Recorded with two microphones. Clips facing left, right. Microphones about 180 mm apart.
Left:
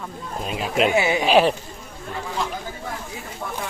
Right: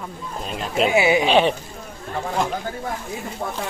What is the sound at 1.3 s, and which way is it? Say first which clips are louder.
Speech: left 1 dB; centre (ahead or behind).